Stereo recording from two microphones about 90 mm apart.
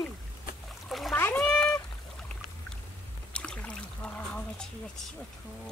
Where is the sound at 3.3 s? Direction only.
10° left (ahead or behind).